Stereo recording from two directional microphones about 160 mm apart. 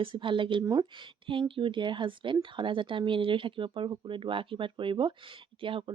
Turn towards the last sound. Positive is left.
turn(degrees=-30)  # may be behind; listen again after turning